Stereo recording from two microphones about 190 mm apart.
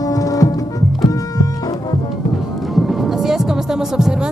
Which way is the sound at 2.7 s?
Centre (ahead or behind).